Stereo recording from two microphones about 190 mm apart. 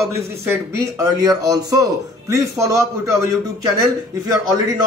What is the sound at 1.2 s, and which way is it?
A man's voice, 20° right (ahead or behind).